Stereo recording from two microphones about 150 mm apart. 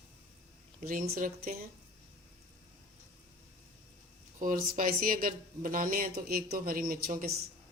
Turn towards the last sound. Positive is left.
turn(degrees=-80)